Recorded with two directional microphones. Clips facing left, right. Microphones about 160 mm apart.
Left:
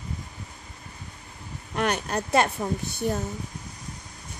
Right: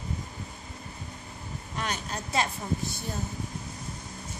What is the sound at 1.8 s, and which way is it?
Speech, 60° left (ahead or behind).